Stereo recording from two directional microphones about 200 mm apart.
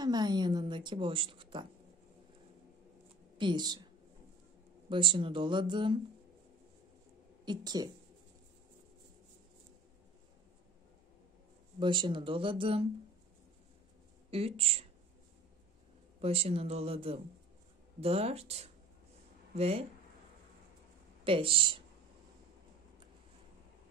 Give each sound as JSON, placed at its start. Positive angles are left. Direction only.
{"t": 0.0, "sound": "a woman's voice", "side_deg": -20}
{"t": 3.3, "sound": "a woman's voice", "side_deg": -20}
{"t": 7.4, "sound": "speech", "side_deg": -20}
{"t": 11.8, "sound": "speech", "side_deg": -25}
{"t": 14.3, "sound": "speech", "side_deg": -30}
{"t": 16.2, "sound": "speech", "side_deg": -30}
{"t": 21.2, "sound": "speech", "side_deg": -25}